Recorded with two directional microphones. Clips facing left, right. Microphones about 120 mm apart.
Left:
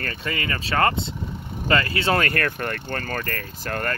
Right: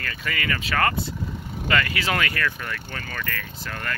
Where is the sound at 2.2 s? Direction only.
50° left (ahead or behind).